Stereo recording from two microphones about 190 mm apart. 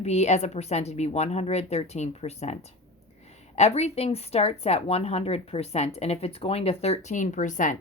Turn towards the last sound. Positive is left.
turn(degrees=40)  # may be behind; listen again after turning